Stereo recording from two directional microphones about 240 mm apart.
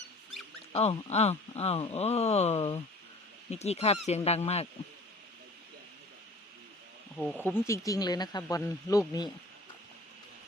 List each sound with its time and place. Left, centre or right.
0.7 s speech: left
7.7 s speech: centre